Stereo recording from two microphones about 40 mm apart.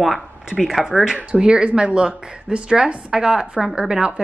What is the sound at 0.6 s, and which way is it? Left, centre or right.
Speech, centre.